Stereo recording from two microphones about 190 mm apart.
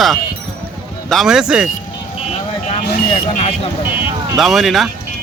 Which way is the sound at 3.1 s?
30° left (ahead or behind).